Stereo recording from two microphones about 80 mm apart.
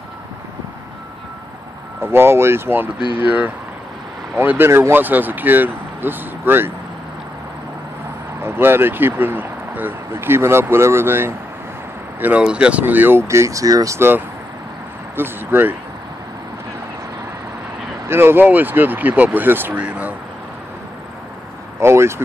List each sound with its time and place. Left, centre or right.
2.0 s speech: right
3.0 s speech: left
3.3 s speech: centre
8.4 s speech: right
12.2 s speech: centre; by 13.9 s right
13.9 s speech: right
18.0 s speech: right
19.7 s speech: centre
21.7 s speech: right